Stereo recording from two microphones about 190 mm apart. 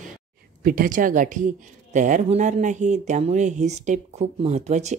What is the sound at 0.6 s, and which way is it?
Speech, 45° right (ahead or behind).